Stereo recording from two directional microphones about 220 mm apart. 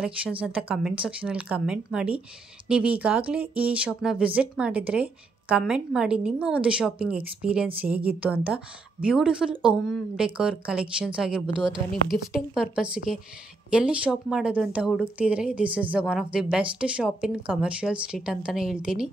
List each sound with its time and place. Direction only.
0.0 s a woman's voice: 5° right (ahead or behind)